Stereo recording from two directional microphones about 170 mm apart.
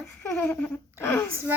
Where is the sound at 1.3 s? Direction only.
15° right (ahead or behind).